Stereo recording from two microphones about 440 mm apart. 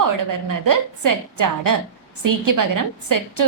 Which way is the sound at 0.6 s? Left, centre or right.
Right.